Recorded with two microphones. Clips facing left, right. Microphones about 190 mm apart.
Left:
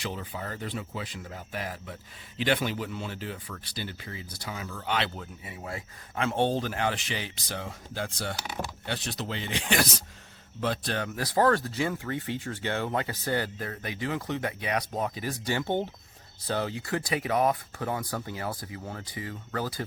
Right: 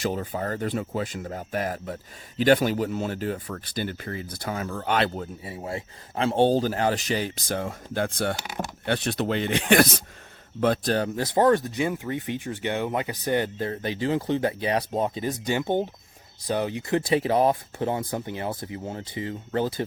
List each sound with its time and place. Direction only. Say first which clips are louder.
0.0 s speech: right 8 dB; 45° right (ahead or behind)
10.6 s a man's voice: right 7 dB; 45° right (ahead or behind)
11.1 s speech: right 3 dB; 25° right (ahead or behind)